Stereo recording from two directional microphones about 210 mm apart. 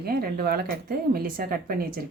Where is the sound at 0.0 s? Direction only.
45° right (ahead or behind).